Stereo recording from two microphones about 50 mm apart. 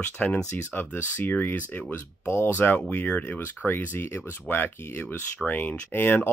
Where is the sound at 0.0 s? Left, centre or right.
Left.